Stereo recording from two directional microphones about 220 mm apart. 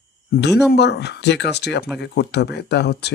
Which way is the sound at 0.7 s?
50° left (ahead or behind).